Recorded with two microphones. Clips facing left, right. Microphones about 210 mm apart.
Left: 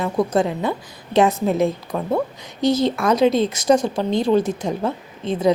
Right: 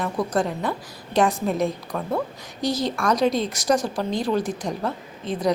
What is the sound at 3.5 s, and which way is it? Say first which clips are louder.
A woman's voice: left 5 dB; 25° left (ahead or behind).